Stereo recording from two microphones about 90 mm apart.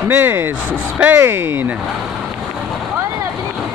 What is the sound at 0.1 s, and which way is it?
Speech, 25° right (ahead or behind).